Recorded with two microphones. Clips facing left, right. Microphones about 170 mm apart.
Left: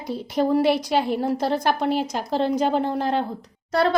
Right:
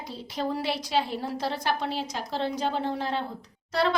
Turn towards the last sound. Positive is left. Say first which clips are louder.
# left 5 dB
turn(degrees=45)  # may be behind; listen again after turning